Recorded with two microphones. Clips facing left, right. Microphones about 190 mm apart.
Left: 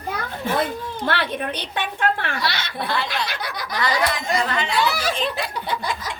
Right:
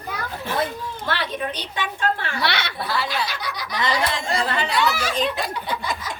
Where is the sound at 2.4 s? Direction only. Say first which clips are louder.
Right 2 dB; 65° right (ahead or behind).